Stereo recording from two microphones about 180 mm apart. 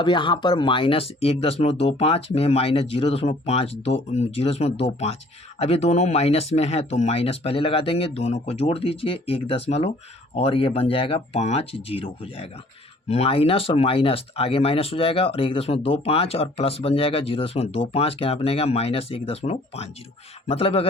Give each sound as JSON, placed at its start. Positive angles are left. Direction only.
{"t": 0.0, "sound": "speech", "side_deg": 25}